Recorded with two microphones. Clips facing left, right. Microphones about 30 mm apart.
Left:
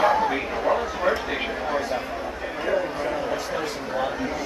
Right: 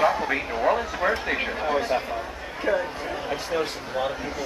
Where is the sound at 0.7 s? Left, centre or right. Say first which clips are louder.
Left 1 dB; right.